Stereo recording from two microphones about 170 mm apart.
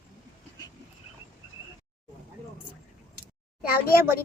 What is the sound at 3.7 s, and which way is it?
Speech, 60° left (ahead or behind).